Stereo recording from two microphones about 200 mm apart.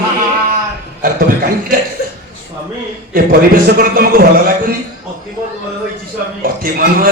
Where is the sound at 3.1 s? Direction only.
45° right (ahead or behind).